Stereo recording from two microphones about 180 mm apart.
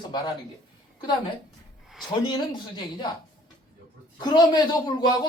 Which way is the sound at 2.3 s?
25° left (ahead or behind).